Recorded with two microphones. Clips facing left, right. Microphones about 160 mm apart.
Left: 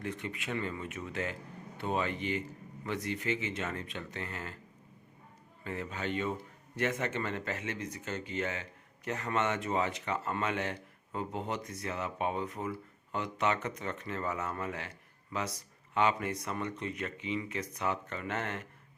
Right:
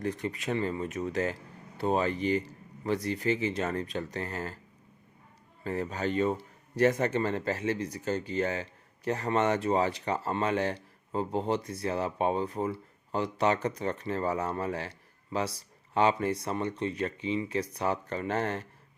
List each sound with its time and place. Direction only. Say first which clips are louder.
0.0 s speech: right 6 dB; 35° right (ahead or behind)
5.6 s speech: right 6 dB; 40° right (ahead or behind)